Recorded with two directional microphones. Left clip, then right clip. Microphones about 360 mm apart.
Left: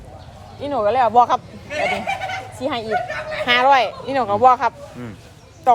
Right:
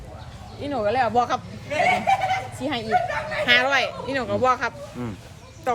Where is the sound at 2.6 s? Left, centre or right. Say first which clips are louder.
Left 4 dB; centre.